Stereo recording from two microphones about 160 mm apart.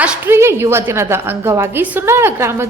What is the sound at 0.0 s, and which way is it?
A woman's voice, 10° right (ahead or behind).